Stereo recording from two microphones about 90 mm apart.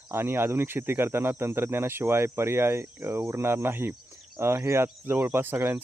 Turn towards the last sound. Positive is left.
turn(degrees=-25)  # may be behind; listen again after turning